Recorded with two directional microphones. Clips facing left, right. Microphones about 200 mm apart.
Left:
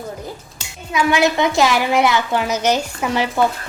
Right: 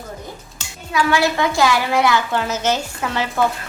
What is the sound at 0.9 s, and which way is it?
A woman's voice, 20° left (ahead or behind).